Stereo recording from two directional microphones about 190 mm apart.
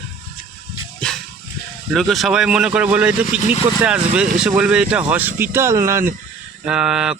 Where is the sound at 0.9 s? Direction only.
Centre (ahead or behind).